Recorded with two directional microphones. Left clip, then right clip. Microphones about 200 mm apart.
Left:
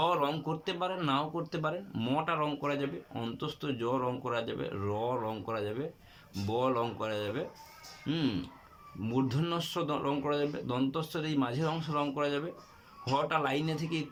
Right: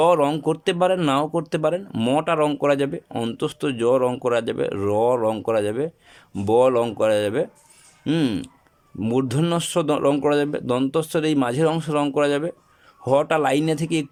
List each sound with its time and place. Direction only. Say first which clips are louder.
0.0 s speech: right 12 dB; 50° right (ahead or behind)